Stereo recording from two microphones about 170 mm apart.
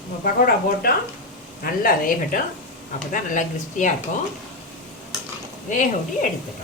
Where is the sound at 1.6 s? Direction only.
55° left (ahead or behind).